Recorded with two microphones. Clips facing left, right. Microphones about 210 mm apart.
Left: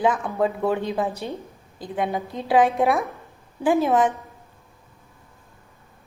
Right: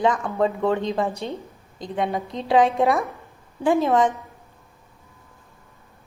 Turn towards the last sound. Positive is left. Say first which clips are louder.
# even
turn(degrees=5)  # may be behind; listen again after turning